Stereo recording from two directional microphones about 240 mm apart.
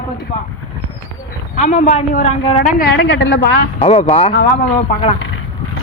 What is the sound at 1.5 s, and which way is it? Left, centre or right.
Speech, left.